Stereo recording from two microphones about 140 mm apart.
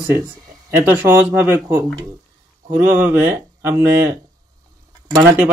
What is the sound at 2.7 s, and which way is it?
Speech, 15° right (ahead or behind).